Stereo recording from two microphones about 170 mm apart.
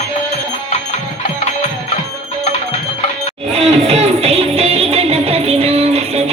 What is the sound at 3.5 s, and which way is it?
Music, 40° right (ahead or behind).